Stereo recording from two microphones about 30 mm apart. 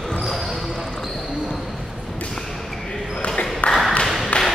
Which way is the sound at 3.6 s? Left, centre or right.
Left.